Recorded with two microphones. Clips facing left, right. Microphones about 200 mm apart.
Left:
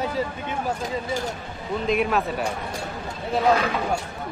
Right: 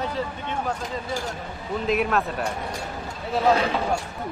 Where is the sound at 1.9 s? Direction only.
Centre (ahead or behind).